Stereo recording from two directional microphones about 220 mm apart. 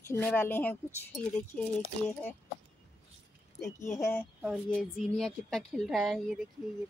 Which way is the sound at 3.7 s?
35° left (ahead or behind).